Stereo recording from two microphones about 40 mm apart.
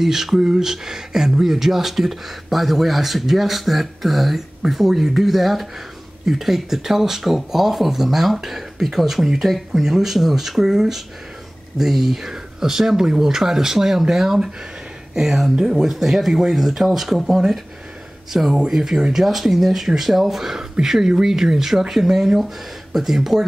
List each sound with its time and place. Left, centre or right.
0.0 s speech: centre